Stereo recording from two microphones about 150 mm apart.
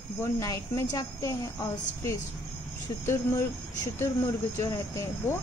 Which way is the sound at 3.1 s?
20° left (ahead or behind).